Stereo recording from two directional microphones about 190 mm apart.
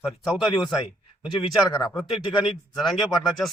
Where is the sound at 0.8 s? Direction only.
30° left (ahead or behind).